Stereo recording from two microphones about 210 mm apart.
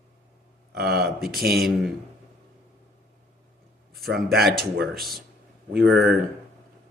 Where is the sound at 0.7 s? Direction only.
50° right (ahead or behind).